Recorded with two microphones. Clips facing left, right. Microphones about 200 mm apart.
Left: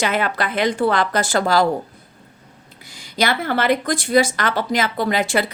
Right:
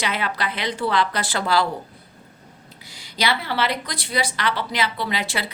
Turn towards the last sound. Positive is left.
turn(degrees=50)  # may be behind; listen again after turning